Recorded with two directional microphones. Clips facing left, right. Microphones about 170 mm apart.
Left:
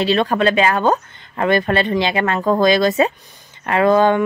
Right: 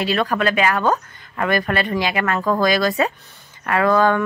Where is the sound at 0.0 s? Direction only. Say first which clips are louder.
Left 4 dB; 25° left (ahead or behind).